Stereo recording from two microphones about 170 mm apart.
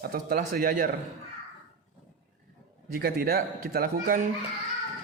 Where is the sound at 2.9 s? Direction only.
65° right (ahead or behind).